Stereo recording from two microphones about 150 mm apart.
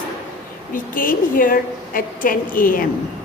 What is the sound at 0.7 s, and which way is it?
A woman's voice, 65° left (ahead or behind).